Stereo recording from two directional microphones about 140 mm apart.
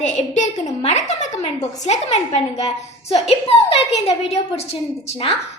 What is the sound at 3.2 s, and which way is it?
A woman's voice, 45° left (ahead or behind).